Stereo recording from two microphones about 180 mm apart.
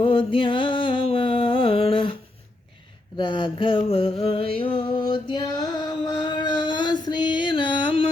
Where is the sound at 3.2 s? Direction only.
25° left (ahead or behind).